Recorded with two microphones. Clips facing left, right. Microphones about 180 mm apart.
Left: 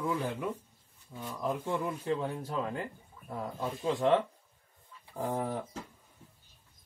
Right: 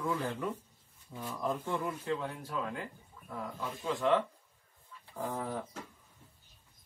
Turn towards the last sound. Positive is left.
turn(degrees=20)  # may be behind; listen again after turning